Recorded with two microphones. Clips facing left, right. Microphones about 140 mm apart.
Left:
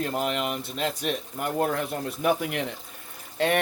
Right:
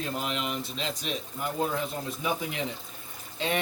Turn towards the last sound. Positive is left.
turn(degrees=60)  # may be behind; listen again after turning